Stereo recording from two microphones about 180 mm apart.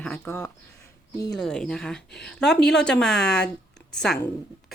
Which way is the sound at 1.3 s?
5° left (ahead or behind).